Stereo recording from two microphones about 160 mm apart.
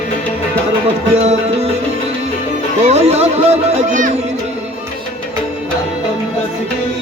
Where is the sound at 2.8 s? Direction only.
40° right (ahead or behind).